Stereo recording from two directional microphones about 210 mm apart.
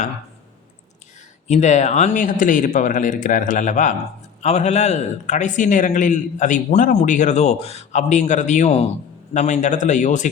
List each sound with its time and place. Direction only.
1.5 s a man's voice: 35° left (ahead or behind)